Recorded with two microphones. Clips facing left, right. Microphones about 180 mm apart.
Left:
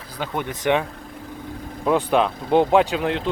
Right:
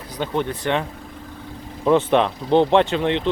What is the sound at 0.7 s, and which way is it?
Speech, 15° left (ahead or behind).